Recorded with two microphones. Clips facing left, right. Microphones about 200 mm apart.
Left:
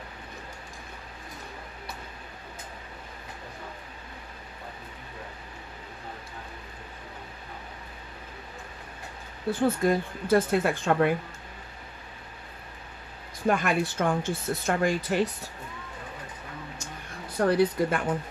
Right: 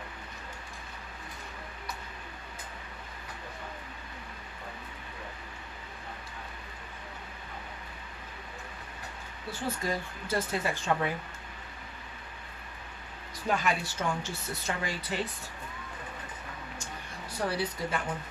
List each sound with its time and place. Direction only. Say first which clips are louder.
9.5 s speech: left 10 dB; 55° left (ahead or behind)
13.5 s speech: left 5 dB; 55° left (ahead or behind)
17.4 s speech: left 10 dB; 55° left (ahead or behind)